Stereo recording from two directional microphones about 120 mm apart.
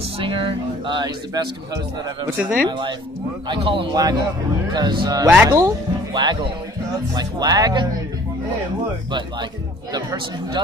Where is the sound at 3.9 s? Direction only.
35° right (ahead or behind).